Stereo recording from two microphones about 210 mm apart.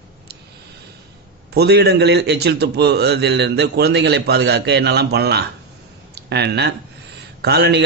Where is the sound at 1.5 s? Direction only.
50° right (ahead or behind).